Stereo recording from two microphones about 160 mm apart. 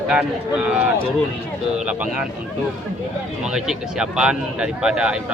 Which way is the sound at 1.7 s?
5° right (ahead or behind).